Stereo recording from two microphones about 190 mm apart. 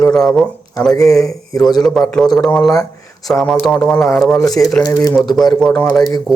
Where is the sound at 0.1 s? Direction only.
Centre (ahead or behind).